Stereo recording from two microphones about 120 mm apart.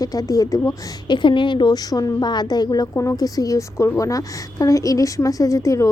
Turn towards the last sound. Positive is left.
turn(degrees=25)  # may be behind; listen again after turning